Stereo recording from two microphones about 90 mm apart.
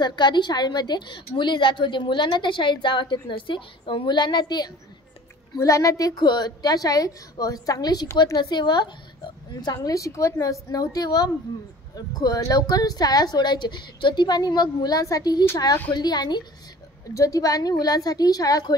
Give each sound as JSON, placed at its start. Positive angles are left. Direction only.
{"t": 0.0, "sound": "a woman's voice", "side_deg": 55}
{"t": 5.6, "sound": "a woman's voice", "side_deg": 40}
{"t": 8.4, "sound": "a woman's voice", "side_deg": 55}
{"t": 17.1, "sound": "a woman's voice", "side_deg": 40}